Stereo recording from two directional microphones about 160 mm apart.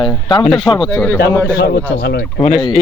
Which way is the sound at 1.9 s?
90° left.